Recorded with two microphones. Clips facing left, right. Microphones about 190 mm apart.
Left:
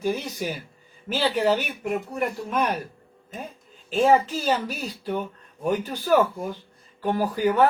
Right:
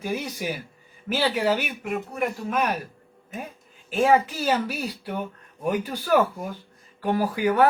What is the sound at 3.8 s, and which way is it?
Speech, 10° right (ahead or behind).